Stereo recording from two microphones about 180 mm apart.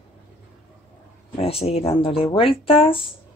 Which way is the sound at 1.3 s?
35° left (ahead or behind).